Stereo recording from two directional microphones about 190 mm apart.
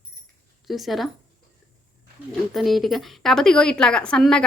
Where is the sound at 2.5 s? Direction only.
Centre (ahead or behind).